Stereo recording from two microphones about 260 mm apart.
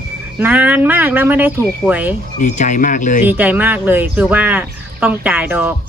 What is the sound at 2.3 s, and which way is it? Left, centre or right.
Speech, left.